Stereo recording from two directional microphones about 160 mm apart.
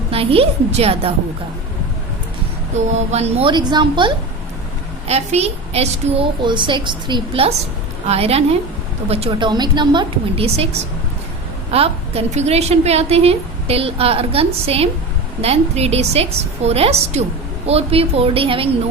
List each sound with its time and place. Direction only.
0.1 s a woman's voice: 35° right (ahead or behind)
2.7 s speech: 45° right (ahead or behind)
3.5 s a woman's voice: 25° right (ahead or behind)
5.0 s a woman's voice: 40° right (ahead or behind)
9.5 s a woman's voice: 30° right (ahead or behind)